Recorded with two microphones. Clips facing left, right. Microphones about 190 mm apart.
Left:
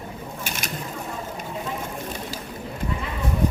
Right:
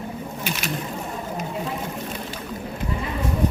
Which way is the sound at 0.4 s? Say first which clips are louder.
Right 4 dB; 50° left (ahead or behind).